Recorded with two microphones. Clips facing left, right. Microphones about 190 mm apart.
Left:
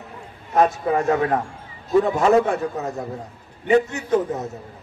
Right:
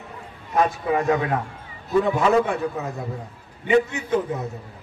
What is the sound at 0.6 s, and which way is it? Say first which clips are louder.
A man's voice: left 2 dB; 40° left (ahead or behind).